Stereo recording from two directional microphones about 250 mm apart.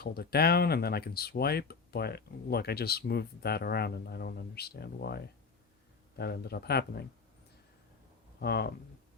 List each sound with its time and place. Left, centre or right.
0.0 s speech: left
8.4 s speech: left